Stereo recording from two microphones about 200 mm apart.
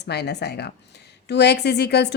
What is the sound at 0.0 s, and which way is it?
A woman's voice, 55° left (ahead or behind).